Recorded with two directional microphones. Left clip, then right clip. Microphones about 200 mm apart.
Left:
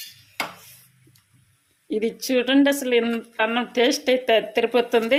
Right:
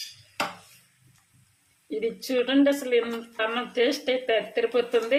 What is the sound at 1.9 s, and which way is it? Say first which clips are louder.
Speech: left 4 dB; 40° left (ahead or behind).